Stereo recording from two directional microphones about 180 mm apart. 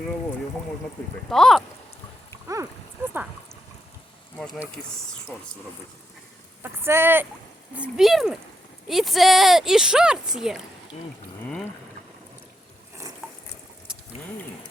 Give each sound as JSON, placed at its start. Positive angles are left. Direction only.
{"t": 1.3, "sound": "speech", "side_deg": 0}
{"t": 2.5, "sound": "a sound", "side_deg": -15}
{"t": 6.6, "sound": "speech", "side_deg": -15}